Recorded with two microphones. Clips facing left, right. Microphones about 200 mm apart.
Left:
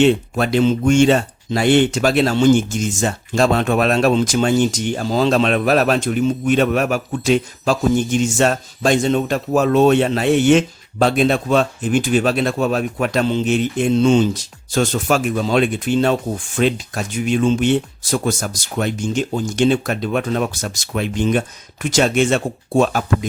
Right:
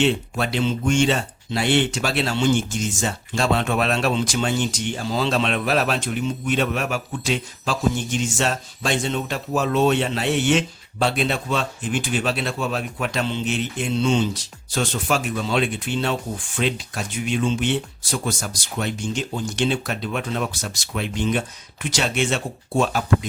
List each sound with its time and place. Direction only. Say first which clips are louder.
0.0 s speech: left 6 dB; 45° left (ahead or behind)